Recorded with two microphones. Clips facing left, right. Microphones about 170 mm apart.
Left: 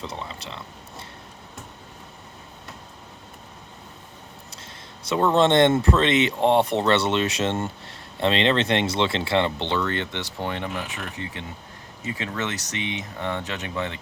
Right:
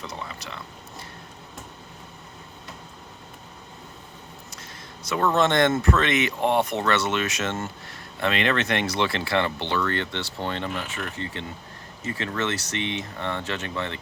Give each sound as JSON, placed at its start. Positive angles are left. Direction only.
{"t": 0.0, "sound": "speech", "side_deg": 25}
{"t": 5.0, "sound": "speech", "side_deg": 25}